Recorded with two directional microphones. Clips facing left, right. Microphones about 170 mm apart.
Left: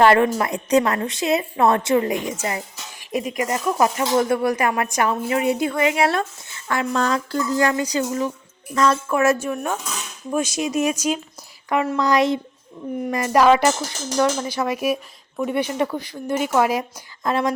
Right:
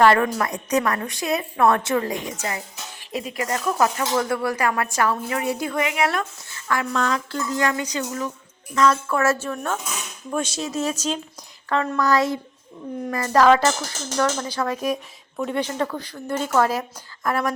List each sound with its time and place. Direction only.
0.0 s speech: 25° left (ahead or behind)
9.0 s a woman's voice: 15° left (ahead or behind)